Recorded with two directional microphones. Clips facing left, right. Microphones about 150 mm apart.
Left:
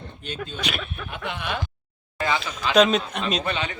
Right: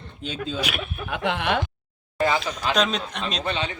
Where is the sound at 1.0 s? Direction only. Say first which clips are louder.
Right 9 dB; 80° right.